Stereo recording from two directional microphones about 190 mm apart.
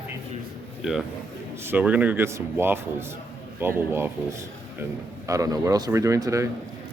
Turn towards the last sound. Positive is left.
turn(degrees=-15)  # may be behind; listen again after turning